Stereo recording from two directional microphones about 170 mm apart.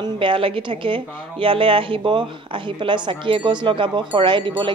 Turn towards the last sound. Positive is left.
turn(degrees=-30)  # may be behind; listen again after turning